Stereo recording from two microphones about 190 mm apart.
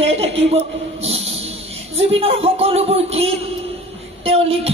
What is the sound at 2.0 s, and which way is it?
Speech, 30° right (ahead or behind).